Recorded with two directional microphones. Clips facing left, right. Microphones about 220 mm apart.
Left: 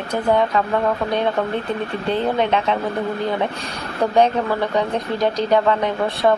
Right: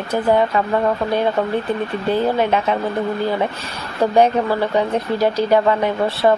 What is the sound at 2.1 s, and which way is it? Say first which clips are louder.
Speech: right 2 dB; 5° right (ahead or behind).